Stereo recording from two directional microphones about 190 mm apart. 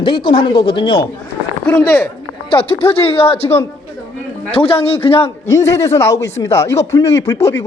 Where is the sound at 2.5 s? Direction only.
30° left (ahead or behind).